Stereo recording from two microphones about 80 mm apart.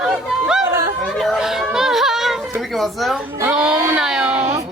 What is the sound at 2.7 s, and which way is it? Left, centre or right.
Speech, centre.